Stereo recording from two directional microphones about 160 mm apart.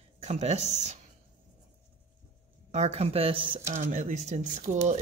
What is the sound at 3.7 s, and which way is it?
Speech, 50° right (ahead or behind).